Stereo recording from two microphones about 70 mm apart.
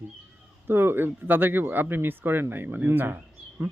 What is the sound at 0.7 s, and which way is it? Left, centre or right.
Speech, right.